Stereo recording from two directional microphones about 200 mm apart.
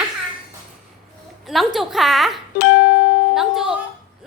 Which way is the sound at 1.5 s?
Centre (ahead or behind).